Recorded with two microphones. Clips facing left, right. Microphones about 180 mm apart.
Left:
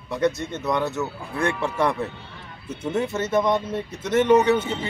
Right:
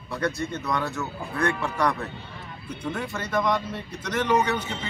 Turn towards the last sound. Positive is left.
turn(degrees=25)  # may be behind; listen again after turning